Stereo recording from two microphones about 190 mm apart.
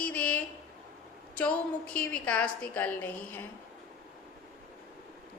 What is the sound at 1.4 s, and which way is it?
A woman's voice, 5° left (ahead or behind).